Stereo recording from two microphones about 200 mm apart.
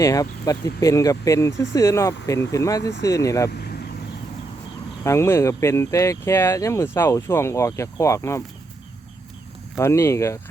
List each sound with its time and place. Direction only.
0.0 s speech: 15° left (ahead or behind)
5.0 s speech: 15° left (ahead or behind)
9.7 s speech: 15° left (ahead or behind)